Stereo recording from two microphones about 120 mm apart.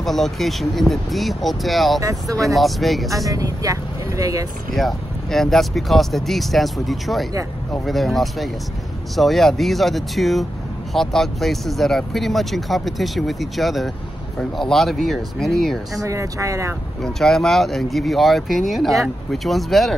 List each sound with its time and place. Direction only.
0.0 s speech: centre (ahead or behind)
2.0 s speech: 30° right (ahead or behind)
2.3 s speech: centre (ahead or behind)
3.3 s speech: 30° right (ahead or behind)
4.7 s speech: centre (ahead or behind)
16.0 s speech: 25° right (ahead or behind)
17.0 s speech: 5° left (ahead or behind)